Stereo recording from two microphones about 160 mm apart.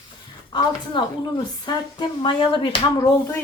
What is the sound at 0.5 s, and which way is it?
A woman's voice, 25° left (ahead or behind).